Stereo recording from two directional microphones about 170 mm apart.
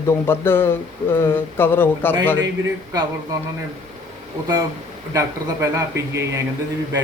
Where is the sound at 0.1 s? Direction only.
15° left (ahead or behind).